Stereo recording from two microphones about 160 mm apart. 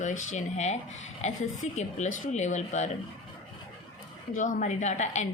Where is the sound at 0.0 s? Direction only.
50° left (ahead or behind).